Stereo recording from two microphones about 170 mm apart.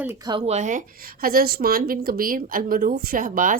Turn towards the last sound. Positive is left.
turn(degrees=-50)  # may be behind; listen again after turning